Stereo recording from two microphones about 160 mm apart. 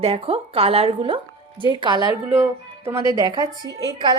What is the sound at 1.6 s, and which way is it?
Speech, 30° left (ahead or behind).